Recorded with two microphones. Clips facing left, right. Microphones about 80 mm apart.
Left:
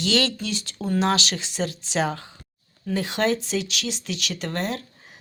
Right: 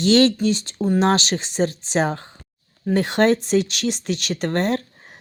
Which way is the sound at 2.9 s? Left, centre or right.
Right.